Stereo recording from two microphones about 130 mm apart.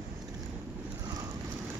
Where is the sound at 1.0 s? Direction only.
30° right (ahead or behind).